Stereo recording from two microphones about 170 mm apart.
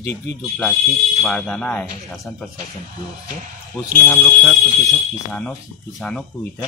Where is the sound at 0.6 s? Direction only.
Centre (ahead or behind).